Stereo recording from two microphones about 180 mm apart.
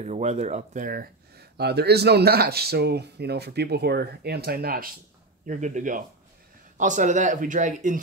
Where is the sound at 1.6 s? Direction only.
65° right (ahead or behind); by 8.0 s 45° right (ahead or behind).